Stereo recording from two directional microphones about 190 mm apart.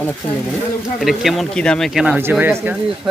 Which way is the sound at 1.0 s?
Centre (ahead or behind).